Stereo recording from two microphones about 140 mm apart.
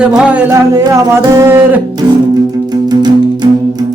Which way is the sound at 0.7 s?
25° right (ahead or behind).